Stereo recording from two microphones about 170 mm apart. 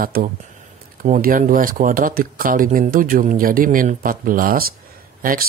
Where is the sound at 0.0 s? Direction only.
60° right (ahead or behind).